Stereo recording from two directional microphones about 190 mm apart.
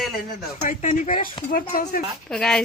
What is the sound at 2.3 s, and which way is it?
Speech, 5° left (ahead or behind).